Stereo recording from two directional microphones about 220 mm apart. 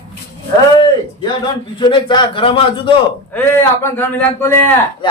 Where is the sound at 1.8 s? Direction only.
20° left (ahead or behind).